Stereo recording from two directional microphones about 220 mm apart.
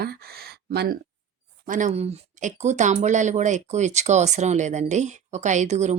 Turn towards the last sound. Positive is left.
turn(degrees=-30)  # may be behind; listen again after turning